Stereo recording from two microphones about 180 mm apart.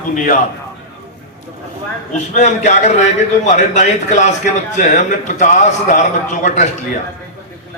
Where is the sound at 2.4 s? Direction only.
40° left (ahead or behind).